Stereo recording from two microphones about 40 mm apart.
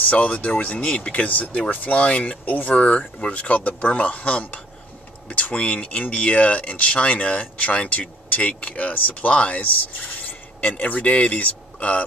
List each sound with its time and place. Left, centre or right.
0.1 s speech: left
10.8 s speech: left